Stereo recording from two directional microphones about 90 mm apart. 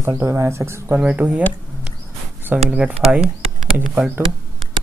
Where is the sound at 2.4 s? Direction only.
25° right (ahead or behind).